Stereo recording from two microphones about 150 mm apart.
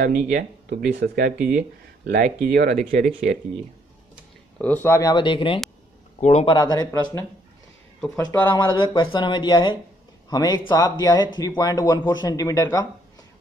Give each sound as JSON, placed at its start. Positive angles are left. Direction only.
{"t": 0.0, "sound": "speech", "side_deg": -85}
{"t": 4.6, "sound": "speech", "side_deg": 10}
{"t": 5.1, "sound": "a man's voice", "side_deg": 35}
{"t": 6.5, "sound": "speech", "side_deg": 25}
{"t": 8.3, "sound": "speech", "side_deg": 30}